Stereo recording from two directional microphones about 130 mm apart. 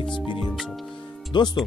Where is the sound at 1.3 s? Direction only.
35° left (ahead or behind).